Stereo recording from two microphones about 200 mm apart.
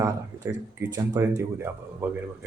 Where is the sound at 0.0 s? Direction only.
15° right (ahead or behind).